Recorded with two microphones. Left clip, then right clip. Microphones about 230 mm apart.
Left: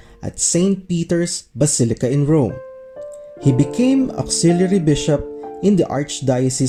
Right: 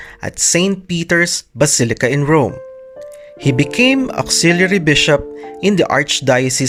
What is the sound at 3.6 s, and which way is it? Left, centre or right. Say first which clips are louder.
Speech: right 5 dB; right.